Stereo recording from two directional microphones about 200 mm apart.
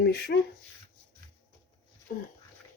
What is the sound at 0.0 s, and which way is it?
Speech, 55° left (ahead or behind).